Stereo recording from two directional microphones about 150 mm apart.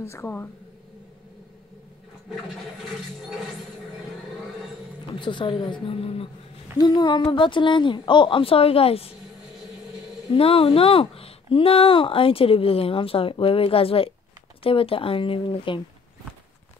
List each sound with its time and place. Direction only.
0.0 s speech: 15° left (ahead or behind)
5.2 s speech: 30° left (ahead or behind)
6.8 s speech: 30° left (ahead or behind)
10.3 s speech: 40° left (ahead or behind)